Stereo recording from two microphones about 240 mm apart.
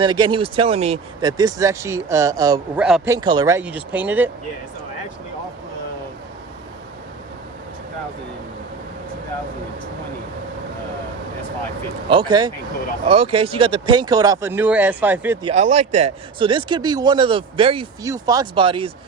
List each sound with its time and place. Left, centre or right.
0.0 s speech: centre
2.7 s a man's voice: centre
3.2 s speech: centre
12.0 s speech: centre
15.4 s a man's voice: right